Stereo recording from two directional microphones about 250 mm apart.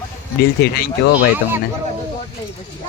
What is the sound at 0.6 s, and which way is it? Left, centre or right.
Speech, left.